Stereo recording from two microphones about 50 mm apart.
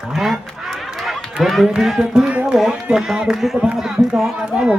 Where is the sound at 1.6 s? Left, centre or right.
Centre.